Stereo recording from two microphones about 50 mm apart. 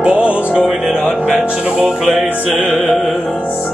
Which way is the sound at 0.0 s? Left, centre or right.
Centre.